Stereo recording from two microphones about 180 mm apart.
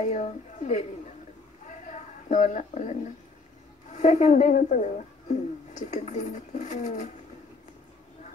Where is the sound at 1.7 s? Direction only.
40° left (ahead or behind).